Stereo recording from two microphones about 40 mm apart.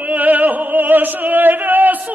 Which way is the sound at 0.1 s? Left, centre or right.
Right.